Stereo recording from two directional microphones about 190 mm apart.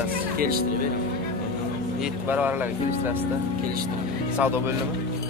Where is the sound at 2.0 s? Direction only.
10° right (ahead or behind).